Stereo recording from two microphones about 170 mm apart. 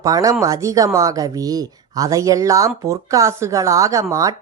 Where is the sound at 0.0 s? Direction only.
20° right (ahead or behind).